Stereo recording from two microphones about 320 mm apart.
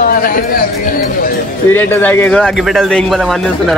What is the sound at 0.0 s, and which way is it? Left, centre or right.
Speech, left.